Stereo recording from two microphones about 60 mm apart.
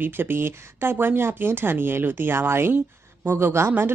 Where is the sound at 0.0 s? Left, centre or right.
Right.